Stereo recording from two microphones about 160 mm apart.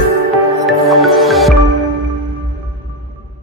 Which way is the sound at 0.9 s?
Centre (ahead or behind).